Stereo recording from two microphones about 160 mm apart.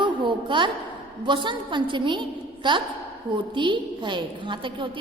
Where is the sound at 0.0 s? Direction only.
30° right (ahead or behind).